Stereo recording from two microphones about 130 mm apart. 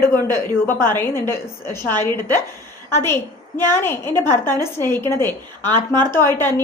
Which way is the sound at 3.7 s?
15° left (ahead or behind).